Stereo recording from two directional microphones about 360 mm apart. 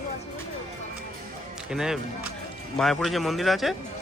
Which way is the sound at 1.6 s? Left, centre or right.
Centre.